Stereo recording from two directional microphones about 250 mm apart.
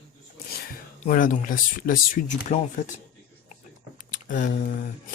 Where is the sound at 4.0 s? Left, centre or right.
Left.